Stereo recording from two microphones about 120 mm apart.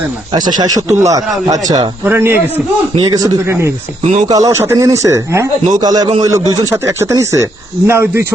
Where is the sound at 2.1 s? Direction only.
20° right (ahead or behind).